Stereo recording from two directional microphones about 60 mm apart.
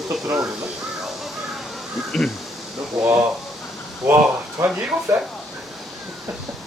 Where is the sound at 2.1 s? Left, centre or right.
Centre.